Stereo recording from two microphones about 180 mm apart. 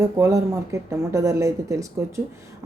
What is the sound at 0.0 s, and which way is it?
Speech, 15° right (ahead or behind).